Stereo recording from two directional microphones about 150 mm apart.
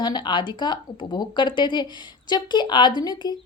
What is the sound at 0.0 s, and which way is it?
A woman's voice, 30° left (ahead or behind).